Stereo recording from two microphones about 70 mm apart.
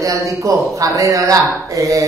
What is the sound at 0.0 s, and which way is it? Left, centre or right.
Speech, right.